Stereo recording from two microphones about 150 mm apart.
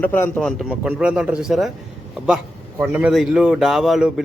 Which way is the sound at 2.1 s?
5° right (ahead or behind).